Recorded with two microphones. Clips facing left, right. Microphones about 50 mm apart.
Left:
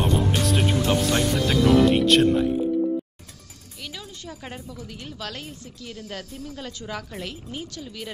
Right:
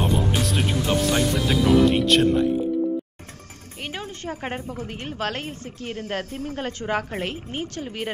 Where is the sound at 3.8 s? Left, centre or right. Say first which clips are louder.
Right 6 dB; right.